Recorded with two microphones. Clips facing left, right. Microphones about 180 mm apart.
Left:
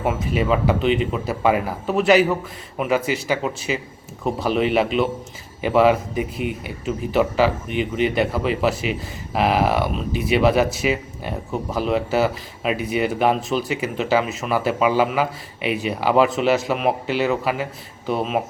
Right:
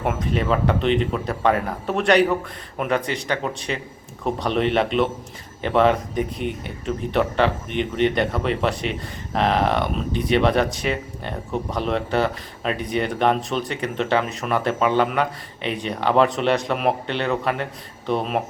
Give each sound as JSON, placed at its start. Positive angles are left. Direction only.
{"t": 0.0, "sound": "speech", "side_deg": 5}